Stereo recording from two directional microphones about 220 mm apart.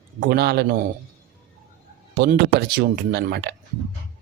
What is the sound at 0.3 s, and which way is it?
Speech, 45° right (ahead or behind).